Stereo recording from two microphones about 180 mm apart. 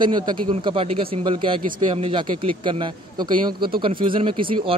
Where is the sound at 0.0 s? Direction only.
25° right (ahead or behind).